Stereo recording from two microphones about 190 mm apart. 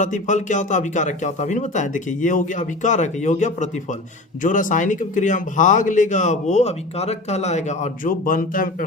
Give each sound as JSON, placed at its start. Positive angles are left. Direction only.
{"t": 0.0, "sound": "a man's voice", "side_deg": 40}